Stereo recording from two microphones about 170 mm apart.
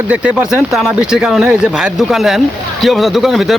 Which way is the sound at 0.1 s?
5° right (ahead or behind).